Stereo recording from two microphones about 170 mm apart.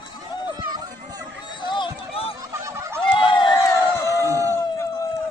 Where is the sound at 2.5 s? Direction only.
20° right (ahead or behind).